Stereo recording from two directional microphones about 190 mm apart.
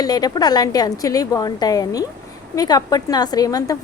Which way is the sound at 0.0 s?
20° left (ahead or behind).